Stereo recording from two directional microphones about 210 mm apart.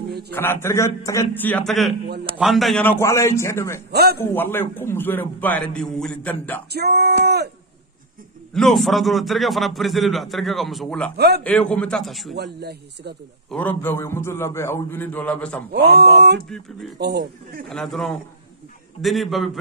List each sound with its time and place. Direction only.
0.3 s a man's voice: 10° left (ahead or behind)
3.9 s speech: 50° right (ahead or behind)
4.2 s a man's voice: 10° left (ahead or behind)
6.7 s speech: 50° right (ahead or behind)
8.5 s speech: centre (ahead or behind)
11.1 s speech: 50° right (ahead or behind)
11.7 s speech: 5° left (ahead or behind)
12.5 s speech: 50° right (ahead or behind)
13.5 s a man's voice: 10° left (ahead or behind)
15.7 s speech: 50° right (ahead or behind)
17.6 s speech: centre (ahead or behind)